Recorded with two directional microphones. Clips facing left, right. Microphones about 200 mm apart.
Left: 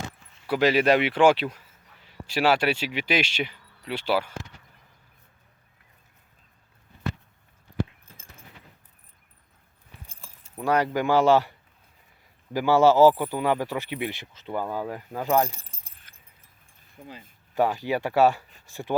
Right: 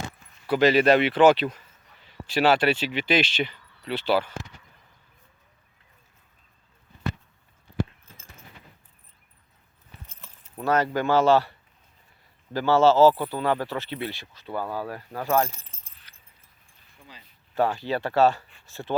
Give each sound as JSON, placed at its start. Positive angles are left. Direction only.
{"t": 0.4, "sound": "speech", "side_deg": 10}
{"t": 10.1, "sound": "keys jangling", "side_deg": 10}
{"t": 10.9, "sound": "speech", "side_deg": 15}
{"t": 12.5, "sound": "speech", "side_deg": 15}
{"t": 16.1, "sound": "a sound", "side_deg": 50}
{"t": 17.0, "sound": "speech", "side_deg": 50}
{"t": 17.5, "sound": "speech", "side_deg": 15}